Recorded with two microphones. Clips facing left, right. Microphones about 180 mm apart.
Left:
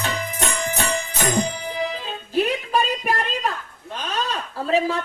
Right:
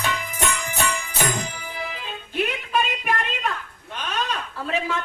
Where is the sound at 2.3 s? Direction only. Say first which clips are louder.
Left 4 dB; 35° left (ahead or behind).